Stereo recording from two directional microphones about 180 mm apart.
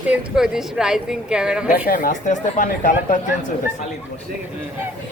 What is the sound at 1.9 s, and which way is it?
Speech, 45° left (ahead or behind).